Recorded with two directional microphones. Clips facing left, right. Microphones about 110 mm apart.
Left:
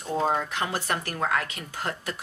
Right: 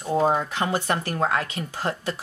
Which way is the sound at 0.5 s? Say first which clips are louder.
Right 4 dB; 30° right (ahead or behind).